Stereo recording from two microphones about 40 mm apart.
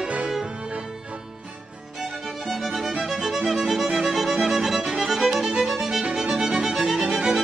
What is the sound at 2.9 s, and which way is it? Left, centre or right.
Music, centre.